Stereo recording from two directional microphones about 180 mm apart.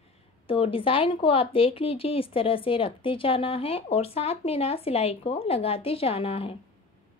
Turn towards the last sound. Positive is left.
turn(degrees=30)  # may be behind; listen again after turning